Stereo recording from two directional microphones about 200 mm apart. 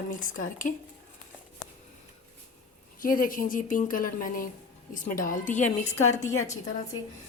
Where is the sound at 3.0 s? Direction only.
45° left (ahead or behind).